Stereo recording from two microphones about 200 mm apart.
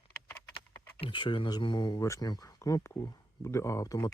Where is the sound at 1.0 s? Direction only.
25° left (ahead or behind).